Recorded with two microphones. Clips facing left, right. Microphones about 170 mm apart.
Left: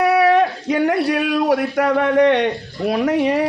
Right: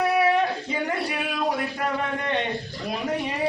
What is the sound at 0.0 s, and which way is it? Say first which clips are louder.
Speech: left 7 dB; 80° left.